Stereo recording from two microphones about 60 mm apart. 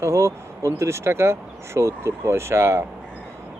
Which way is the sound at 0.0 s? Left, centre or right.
Right.